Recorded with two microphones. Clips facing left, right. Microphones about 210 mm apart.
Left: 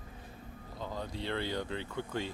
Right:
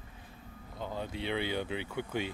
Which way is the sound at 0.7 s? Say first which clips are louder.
Right 2 dB; 20° right (ahead or behind).